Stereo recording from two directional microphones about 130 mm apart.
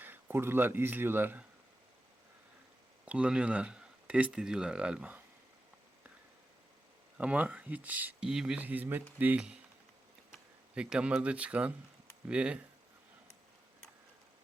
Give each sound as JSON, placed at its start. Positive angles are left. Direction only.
{"t": 0.0, "sound": "speech", "side_deg": -15}
{"t": 3.1, "sound": "speech", "side_deg": -10}
{"t": 7.2, "sound": "speech", "side_deg": -10}
{"t": 10.8, "sound": "speech", "side_deg": -5}